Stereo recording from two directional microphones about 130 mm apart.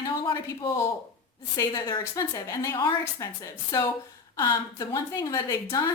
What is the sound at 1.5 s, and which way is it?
A woman's voice, 25° left (ahead or behind).